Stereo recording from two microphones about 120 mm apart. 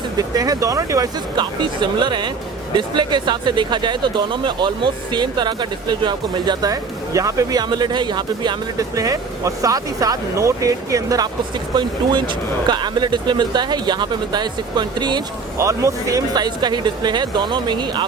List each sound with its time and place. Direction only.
0.2 s speech: 30° right (ahead or behind)
12.6 s speech: 40° right (ahead or behind)
15.5 s speech: 25° right (ahead or behind)